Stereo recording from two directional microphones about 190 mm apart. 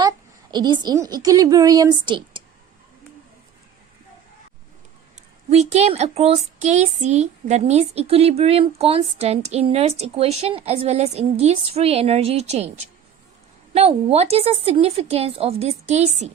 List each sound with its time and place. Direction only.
0.5 s a woman's voice: 20° right (ahead or behind)
5.5 s speech: 35° right (ahead or behind)